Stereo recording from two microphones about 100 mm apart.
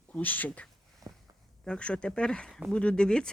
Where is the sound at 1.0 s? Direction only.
35° right (ahead or behind).